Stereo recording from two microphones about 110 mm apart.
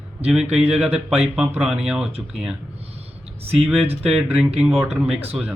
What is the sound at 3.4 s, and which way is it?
Speech, 65° right (ahead or behind).